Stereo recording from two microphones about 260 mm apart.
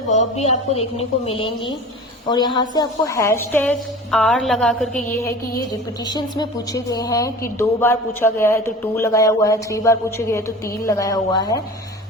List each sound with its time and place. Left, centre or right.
0.1 s a man's voice: left; by 5.3 s centre
6.1 s a man's voice: centre